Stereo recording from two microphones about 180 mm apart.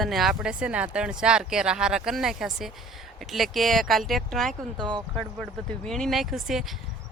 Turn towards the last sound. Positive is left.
turn(degrees=0)  # may be behind; listen again after turning